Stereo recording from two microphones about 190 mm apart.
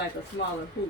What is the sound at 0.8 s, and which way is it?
Speech, 65° left (ahead or behind).